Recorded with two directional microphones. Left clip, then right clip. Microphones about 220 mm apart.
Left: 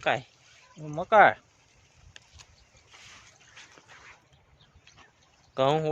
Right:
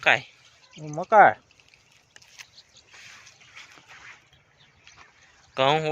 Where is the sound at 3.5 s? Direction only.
30° right (ahead or behind).